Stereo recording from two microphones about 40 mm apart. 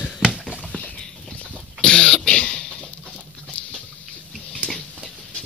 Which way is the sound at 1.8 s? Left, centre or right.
Left.